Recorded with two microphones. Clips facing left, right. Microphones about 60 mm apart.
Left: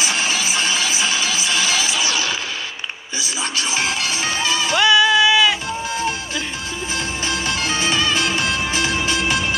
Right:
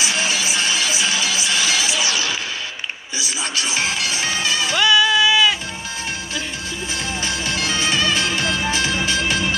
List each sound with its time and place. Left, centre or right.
0.0 s music: left
4.7 s music: centre
7.2 s music: left